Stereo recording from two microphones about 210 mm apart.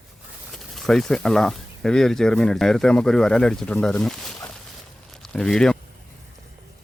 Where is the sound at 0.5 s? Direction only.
Centre (ahead or behind).